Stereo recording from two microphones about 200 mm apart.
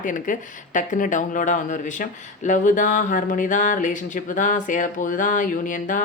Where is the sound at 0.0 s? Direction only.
40° left (ahead or behind).